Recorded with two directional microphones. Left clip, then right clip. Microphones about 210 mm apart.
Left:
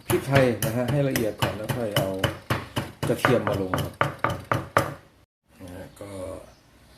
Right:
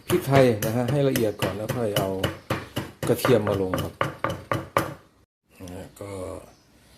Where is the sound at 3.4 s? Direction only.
5° right (ahead or behind).